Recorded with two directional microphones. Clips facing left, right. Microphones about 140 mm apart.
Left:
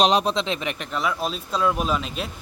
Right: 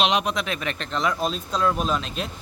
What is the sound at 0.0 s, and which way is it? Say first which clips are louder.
Speech: left 3 dB; 35° left (ahead or behind).